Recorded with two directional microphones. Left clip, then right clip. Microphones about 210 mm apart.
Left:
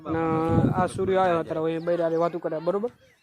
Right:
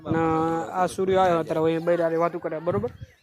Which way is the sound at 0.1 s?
5° right (ahead or behind).